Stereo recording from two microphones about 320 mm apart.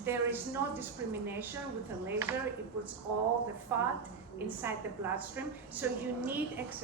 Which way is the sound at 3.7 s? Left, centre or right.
Centre.